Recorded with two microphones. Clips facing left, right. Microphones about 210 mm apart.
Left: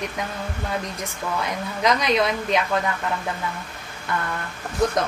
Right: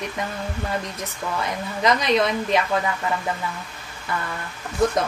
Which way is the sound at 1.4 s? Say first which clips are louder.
Right 1 dB; centre (ahead or behind).